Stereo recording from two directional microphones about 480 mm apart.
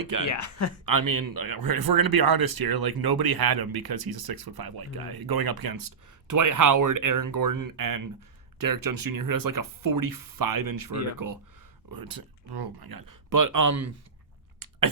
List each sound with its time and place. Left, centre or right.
0.0 s speech: right
0.3 s speech: left
0.9 s speech: right
14.6 s chewing: right